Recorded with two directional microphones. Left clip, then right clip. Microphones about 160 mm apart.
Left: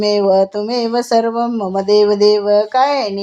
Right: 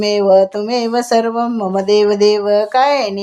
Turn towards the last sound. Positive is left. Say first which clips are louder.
# right 1 dB
turn(degrees=-15)  # may be behind; listen again after turning